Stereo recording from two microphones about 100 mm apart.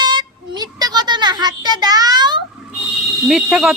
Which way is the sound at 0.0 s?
45° right (ahead or behind).